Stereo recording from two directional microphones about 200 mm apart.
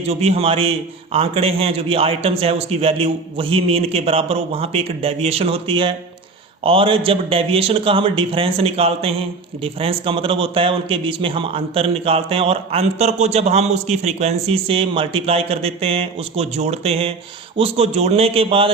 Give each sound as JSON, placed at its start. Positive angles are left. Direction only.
{"t": 0.0, "sound": "a man's voice", "side_deg": -30}